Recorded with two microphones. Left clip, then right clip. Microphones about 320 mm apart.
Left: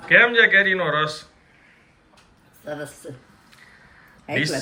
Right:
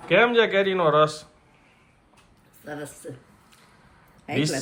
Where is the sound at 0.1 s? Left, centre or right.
Centre.